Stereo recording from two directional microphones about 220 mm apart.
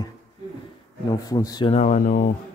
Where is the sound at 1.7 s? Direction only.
35° left (ahead or behind).